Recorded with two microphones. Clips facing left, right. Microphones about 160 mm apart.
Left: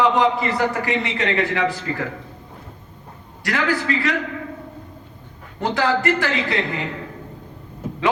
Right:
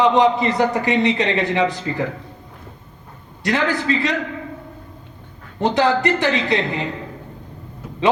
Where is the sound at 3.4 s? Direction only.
20° right (ahead or behind).